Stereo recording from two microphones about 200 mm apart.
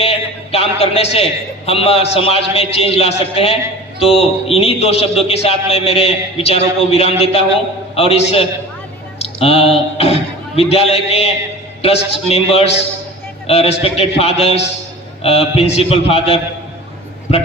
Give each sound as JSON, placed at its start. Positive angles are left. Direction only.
{"t": 0.0, "sound": "a man's voice", "side_deg": 30}
{"t": 9.2, "sound": "a man's voice", "side_deg": 30}